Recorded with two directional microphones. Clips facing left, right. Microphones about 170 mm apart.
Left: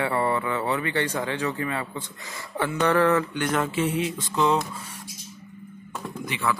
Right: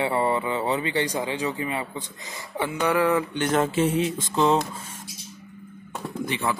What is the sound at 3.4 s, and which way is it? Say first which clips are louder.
Speech: right 6 dB; 30° right (ahead or behind).